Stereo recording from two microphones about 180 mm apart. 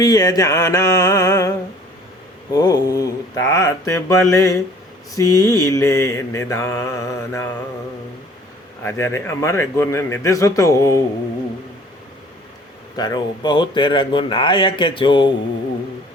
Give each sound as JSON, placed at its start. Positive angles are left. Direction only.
{"t": 0.0, "sound": "mantra", "side_deg": 20}
{"t": 8.8, "sound": "mantra", "side_deg": 15}
{"t": 13.0, "sound": "speech", "side_deg": 25}